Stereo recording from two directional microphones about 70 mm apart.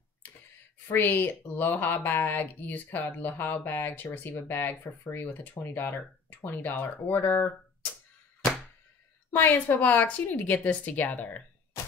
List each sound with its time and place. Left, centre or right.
0.8 s speech: left
9.3 s speech: left